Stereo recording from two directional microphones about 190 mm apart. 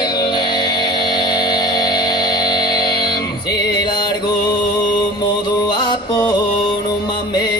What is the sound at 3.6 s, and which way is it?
Mantra, 20° left (ahead or behind).